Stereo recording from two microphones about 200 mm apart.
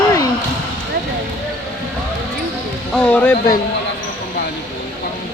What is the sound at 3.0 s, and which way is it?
Speech, 10° left (ahead or behind).